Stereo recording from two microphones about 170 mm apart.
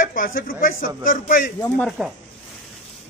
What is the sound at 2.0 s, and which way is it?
Speech, 5° right (ahead or behind).